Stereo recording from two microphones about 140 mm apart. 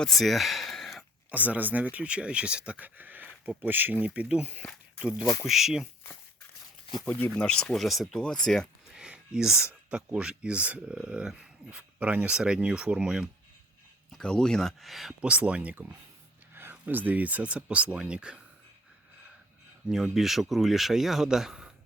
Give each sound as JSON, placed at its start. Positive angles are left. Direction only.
{"t": 0.0, "sound": "speech", "side_deg": 0}
{"t": 1.3, "sound": "speech", "side_deg": -10}
{"t": 5.2, "sound": "speech", "side_deg": 25}
{"t": 5.5, "sound": "speech", "side_deg": 0}
{"t": 7.0, "sound": "speech", "side_deg": 10}
{"t": 19.9, "sound": "speech", "side_deg": 0}